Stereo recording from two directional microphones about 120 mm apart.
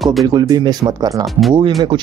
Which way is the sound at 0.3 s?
35° right (ahead or behind).